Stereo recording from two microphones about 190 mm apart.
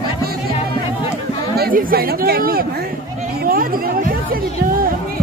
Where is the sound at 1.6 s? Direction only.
50° right (ahead or behind).